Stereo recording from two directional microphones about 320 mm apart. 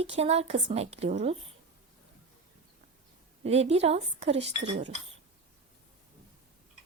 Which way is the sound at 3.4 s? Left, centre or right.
Centre.